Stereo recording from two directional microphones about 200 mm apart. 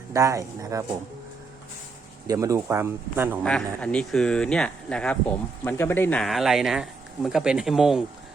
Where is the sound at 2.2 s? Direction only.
15° right (ahead or behind).